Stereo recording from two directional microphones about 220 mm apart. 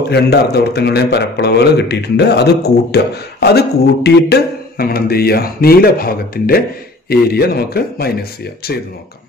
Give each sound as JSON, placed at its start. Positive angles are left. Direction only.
{"t": 0.1, "sound": "a man's voice", "side_deg": 45}